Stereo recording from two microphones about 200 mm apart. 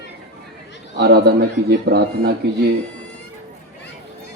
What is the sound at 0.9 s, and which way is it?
A man's voice, 55° right (ahead or behind).